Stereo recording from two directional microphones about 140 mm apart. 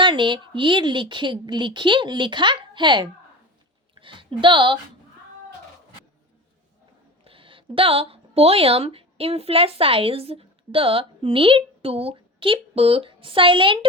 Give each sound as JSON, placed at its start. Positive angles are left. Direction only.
{"t": 0.0, "sound": "a woman's voice", "side_deg": -35}
{"t": 7.3, "sound": "a woman's voice", "side_deg": -40}